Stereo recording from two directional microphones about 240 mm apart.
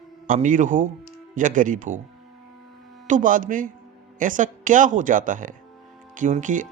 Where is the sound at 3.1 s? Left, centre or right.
Right.